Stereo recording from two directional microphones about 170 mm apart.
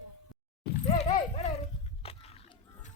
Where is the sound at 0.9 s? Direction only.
40° left (ahead or behind).